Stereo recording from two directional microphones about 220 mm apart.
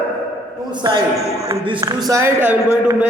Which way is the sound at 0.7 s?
20° right (ahead or behind).